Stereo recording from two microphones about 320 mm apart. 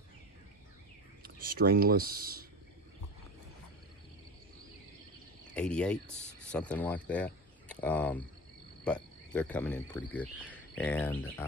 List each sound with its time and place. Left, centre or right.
1.2 s speech: right
5.5 s speech: centre
8.8 s cricket: centre
10.8 s speech: centre